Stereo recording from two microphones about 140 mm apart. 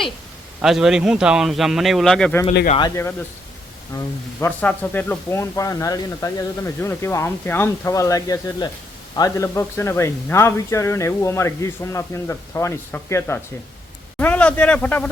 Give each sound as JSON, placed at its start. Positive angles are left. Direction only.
{"t": 0.6, "sound": "a man's voice", "side_deg": -5}
{"t": 2.9, "sound": "a man's voice", "side_deg": 15}